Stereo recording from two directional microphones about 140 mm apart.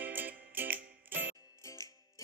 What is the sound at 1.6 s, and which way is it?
Music, 20° left (ahead or behind).